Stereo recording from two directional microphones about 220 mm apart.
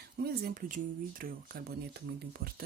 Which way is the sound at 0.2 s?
45° right (ahead or behind).